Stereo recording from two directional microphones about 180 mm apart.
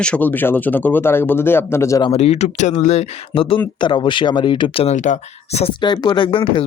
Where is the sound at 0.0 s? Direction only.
5° left (ahead or behind).